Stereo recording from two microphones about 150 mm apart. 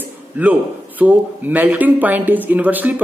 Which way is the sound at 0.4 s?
10° right (ahead or behind).